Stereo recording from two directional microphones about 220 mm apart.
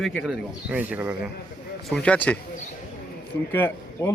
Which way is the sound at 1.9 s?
5° left (ahead or behind).